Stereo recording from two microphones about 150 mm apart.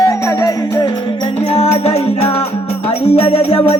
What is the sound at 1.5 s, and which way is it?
Music, 45° left (ahead or behind).